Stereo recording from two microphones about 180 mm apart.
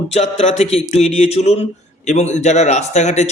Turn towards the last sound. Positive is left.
turn(degrees=40)  # may be behind; listen again after turning